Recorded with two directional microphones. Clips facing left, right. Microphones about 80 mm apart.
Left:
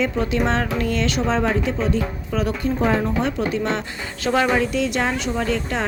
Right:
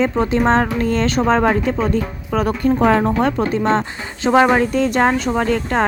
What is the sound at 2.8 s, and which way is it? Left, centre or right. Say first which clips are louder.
Speech: right 4 dB; right.